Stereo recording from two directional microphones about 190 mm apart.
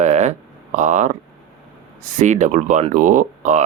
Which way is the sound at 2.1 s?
40° right (ahead or behind).